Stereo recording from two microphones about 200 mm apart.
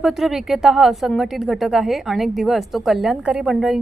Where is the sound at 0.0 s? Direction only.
Centre (ahead or behind).